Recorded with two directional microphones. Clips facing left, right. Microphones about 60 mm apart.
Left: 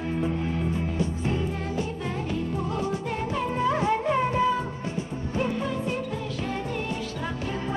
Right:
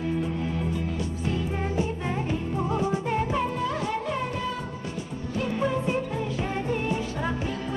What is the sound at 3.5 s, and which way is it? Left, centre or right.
Music, left.